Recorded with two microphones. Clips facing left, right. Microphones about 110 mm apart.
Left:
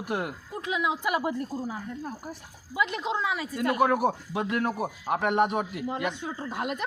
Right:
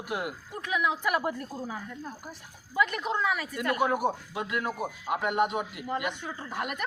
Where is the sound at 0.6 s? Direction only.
25° left (ahead or behind).